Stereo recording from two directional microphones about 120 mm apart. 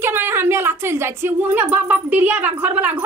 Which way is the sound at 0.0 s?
20° right (ahead or behind).